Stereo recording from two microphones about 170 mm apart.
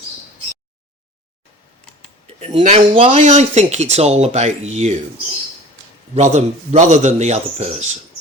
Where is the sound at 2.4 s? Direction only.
35° right (ahead or behind).